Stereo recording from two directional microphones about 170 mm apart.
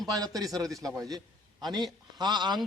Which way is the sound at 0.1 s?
20° right (ahead or behind).